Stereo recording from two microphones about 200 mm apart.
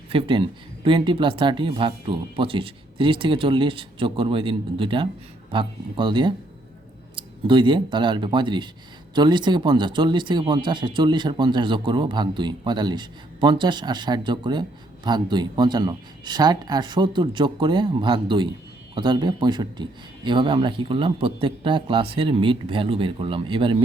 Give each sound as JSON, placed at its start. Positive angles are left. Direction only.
{"t": 0.1, "sound": "speech", "side_deg": -25}